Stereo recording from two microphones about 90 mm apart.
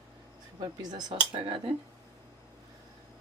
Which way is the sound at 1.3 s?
75° right (ahead or behind).